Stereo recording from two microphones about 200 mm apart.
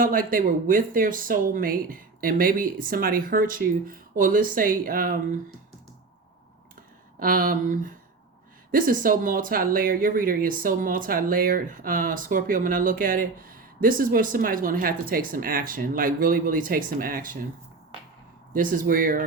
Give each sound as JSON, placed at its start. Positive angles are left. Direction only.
{"t": 0.0, "sound": "speech", "side_deg": -45}
{"t": 7.2, "sound": "speech", "side_deg": -45}
{"t": 18.5, "sound": "speech", "side_deg": -45}